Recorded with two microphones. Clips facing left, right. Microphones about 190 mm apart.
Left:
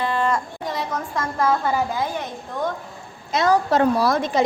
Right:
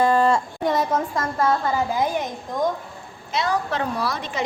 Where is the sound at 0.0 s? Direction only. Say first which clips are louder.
Right 5 dB; 40° right (ahead or behind).